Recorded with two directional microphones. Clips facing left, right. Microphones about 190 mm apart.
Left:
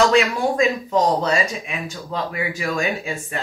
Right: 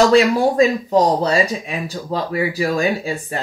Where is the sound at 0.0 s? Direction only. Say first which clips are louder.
Right 4 dB; 35° right (ahead or behind).